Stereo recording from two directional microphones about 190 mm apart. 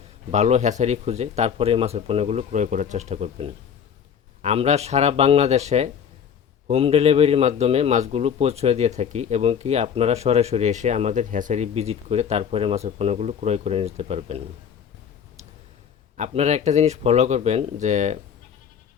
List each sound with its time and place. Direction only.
0.3 s speech: 35° right (ahead or behind)
16.1 s speech: 35° right (ahead or behind)